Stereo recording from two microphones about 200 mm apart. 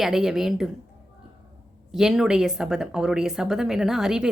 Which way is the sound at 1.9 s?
Centre (ahead or behind).